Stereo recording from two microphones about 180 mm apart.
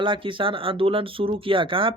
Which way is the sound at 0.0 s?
30° right (ahead or behind).